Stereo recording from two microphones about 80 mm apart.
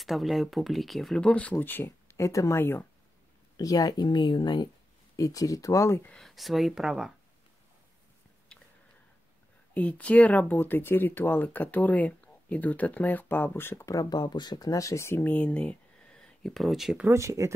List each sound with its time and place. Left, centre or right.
0.0 s speech: centre
1.1 s speech: centre; by 2.6 s left
2.6 s speech: left
3.5 s speech: left
5.1 s speech: left
6.1 s speech: centre
9.8 s speech: centre
13.8 s speech: left
15.2 s a sound: centre
16.6 s speech: centre
17.1 s speech: right